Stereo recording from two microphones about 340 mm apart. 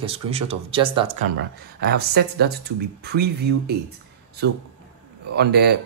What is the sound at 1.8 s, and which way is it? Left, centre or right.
Speech, right.